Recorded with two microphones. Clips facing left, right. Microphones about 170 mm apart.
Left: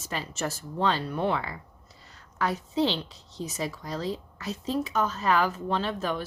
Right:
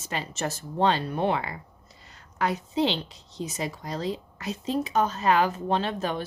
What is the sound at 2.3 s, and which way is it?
A woman's voice, 20° right (ahead or behind).